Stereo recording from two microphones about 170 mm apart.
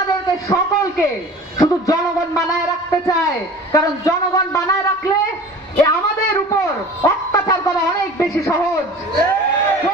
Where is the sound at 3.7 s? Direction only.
20° left (ahead or behind).